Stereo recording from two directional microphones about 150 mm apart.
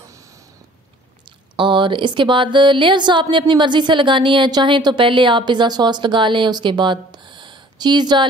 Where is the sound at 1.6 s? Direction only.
35° right (ahead or behind).